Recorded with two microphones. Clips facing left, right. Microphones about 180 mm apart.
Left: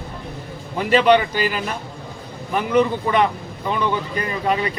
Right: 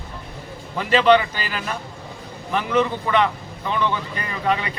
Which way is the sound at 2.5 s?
10° left (ahead or behind).